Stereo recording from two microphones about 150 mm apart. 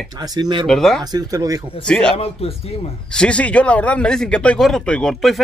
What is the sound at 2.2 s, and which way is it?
Speech, 40° left (ahead or behind).